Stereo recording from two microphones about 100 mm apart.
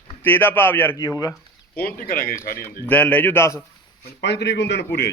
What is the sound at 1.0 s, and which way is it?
Speech, 40° left (ahead or behind).